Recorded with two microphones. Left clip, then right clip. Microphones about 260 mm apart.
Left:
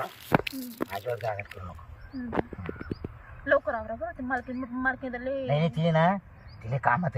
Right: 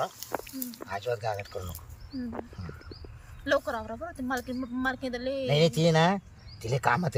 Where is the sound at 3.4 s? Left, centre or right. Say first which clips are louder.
Left 3 dB; centre.